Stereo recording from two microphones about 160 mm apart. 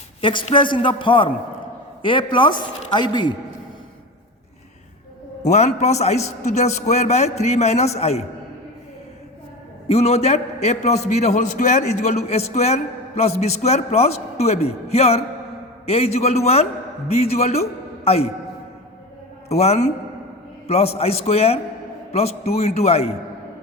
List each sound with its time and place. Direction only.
0.2 s a woman's voice: 30° left (ahead or behind)
5.4 s a man's voice: 45° left (ahead or behind)
9.9 s a man's voice: 40° left (ahead or behind)
19.5 s a man's voice: 40° left (ahead or behind)